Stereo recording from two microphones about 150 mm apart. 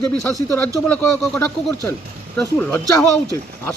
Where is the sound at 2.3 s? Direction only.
15° left (ahead or behind).